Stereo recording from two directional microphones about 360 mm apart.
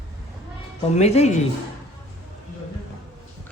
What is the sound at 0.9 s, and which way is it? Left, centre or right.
Speech, centre.